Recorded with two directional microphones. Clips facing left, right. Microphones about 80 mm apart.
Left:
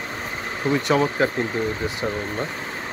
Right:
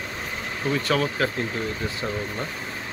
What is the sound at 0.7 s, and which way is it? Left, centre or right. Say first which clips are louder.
Speech: left 4 dB; left.